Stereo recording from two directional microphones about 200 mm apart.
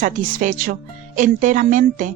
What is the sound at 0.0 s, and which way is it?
A woman's voice, 40° right (ahead or behind).